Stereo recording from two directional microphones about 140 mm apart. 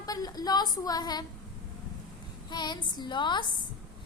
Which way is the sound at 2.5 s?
30° left (ahead or behind).